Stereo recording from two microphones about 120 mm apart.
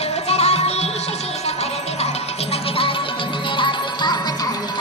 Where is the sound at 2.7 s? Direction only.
50° left (ahead or behind).